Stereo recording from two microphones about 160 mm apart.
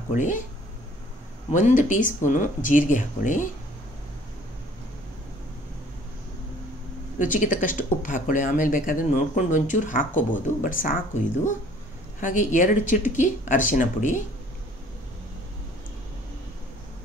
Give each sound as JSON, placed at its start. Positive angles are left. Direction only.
{"t": 0.1, "sound": "speech", "side_deg": 55}
{"t": 1.5, "sound": "speech", "side_deg": 50}
{"t": 7.2, "sound": "speech", "side_deg": 55}
{"t": 12.2, "sound": "speech", "side_deg": 55}